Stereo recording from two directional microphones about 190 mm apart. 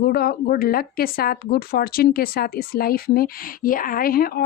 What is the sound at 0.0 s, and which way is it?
Speech, 55° left (ahead or behind).